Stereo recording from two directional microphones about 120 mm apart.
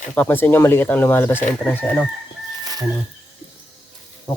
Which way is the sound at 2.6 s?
30° right (ahead or behind).